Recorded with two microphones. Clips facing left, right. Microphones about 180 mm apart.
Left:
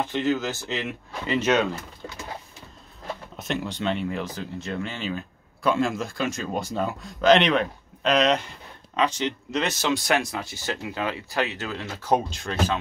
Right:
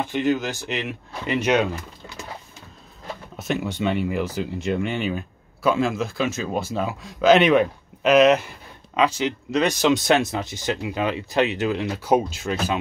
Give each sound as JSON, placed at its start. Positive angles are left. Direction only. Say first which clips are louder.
{"t": 0.0, "sound": "speech", "louder": "right 2 dB", "side_deg": -15}
{"t": 3.3, "sound": "speech", "louder": "right 5 dB", "side_deg": -5}